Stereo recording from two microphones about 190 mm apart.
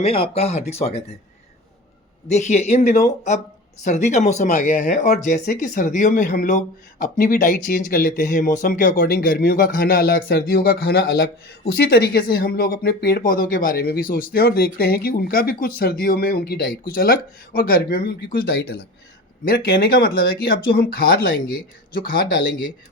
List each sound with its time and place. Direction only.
0.0 s speech: 30° left (ahead or behind)
2.2 s speech: 35° left (ahead or behind)
5.2 s speech: 40° left (ahead or behind)